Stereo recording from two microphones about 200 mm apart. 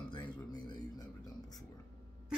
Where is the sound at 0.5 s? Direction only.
20° left (ahead or behind).